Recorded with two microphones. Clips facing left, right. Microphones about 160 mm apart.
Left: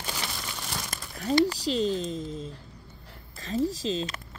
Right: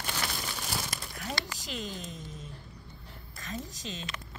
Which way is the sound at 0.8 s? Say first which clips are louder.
Left 4 dB; 35° left (ahead or behind).